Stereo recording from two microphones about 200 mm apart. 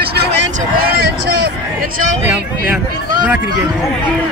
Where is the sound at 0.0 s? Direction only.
55° right (ahead or behind).